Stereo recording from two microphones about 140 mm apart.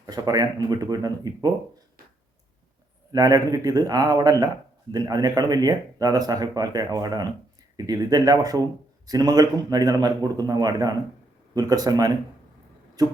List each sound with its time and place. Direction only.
0.0 s speech: 30° right (ahead or behind)
3.1 s speech: 25° right (ahead or behind)